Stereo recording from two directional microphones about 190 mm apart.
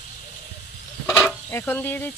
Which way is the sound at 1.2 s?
10° left (ahead or behind).